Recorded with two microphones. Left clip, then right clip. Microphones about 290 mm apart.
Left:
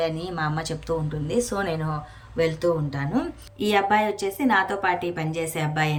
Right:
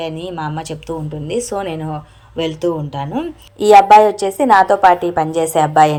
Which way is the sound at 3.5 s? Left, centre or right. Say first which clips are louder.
Right 15 dB; centre.